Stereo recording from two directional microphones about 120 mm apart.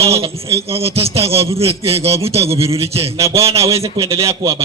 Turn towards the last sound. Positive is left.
turn(degrees=-50)  # may be behind; listen again after turning